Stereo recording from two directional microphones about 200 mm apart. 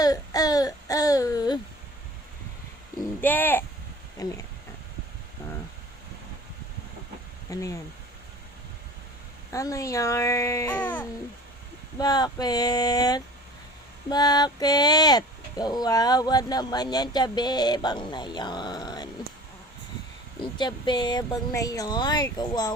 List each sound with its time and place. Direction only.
0.0 s a sound: 20° left (ahead or behind)
3.2 s speech: 10° left (ahead or behind)
7.5 s speech: 15° left (ahead or behind)
9.5 s speech: 15° left (ahead or behind)
11.9 s speech: 20° left (ahead or behind)
20.4 s speech: 20° left (ahead or behind)